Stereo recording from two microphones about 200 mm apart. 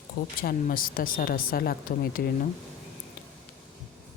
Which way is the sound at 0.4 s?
45° left (ahead or behind).